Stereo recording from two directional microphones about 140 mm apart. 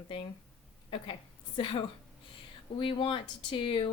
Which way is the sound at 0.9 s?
40° left (ahead or behind).